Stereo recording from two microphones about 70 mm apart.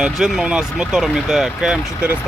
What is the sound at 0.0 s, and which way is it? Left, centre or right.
Speech, centre.